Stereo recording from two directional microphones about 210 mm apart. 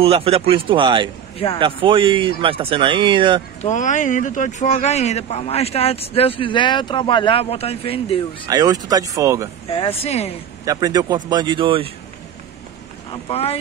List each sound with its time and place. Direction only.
0.0 s speech: 25° right (ahead or behind)
3.6 s speech: 35° left (ahead or behind)
8.5 s speech: 15° right (ahead or behind)
9.7 s speech: 25° left (ahead or behind)
10.6 s speech: 15° right (ahead or behind)
13.1 s speech: 30° left (ahead or behind)